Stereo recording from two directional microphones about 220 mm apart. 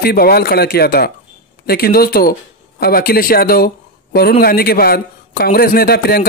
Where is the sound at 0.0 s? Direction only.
45° left (ahead or behind).